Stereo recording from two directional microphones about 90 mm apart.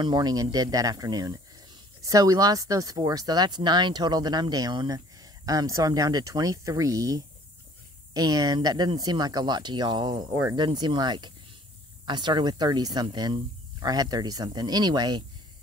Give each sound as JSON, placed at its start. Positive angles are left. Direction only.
{"t": 0.0, "sound": "speech", "side_deg": -50}